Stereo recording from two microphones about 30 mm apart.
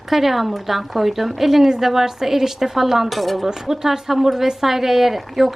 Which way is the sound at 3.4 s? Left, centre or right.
Centre.